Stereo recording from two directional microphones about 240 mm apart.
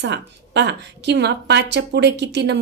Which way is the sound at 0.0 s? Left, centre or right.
Right.